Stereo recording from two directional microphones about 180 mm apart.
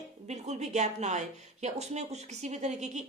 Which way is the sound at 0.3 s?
40° right (ahead or behind).